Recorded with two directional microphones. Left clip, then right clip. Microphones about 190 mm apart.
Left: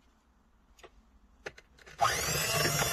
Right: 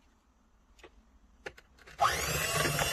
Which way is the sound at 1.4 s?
Centre (ahead or behind).